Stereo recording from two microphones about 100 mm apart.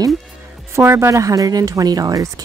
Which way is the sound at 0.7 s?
25° right (ahead or behind).